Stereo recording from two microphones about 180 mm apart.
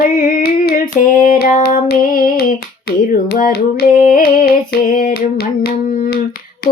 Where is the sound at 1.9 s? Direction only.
50° left (ahead or behind).